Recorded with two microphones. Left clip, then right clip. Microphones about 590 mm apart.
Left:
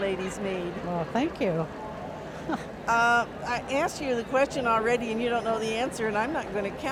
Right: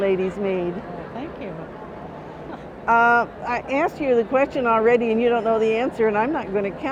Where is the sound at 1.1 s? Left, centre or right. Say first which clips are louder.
Left 5 dB; left.